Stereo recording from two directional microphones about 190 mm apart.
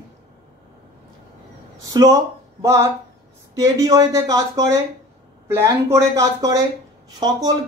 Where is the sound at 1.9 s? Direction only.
20° right (ahead or behind).